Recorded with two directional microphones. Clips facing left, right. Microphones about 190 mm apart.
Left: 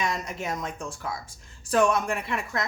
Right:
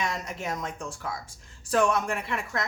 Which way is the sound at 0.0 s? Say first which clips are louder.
Left 2 dB; 15° left (ahead or behind).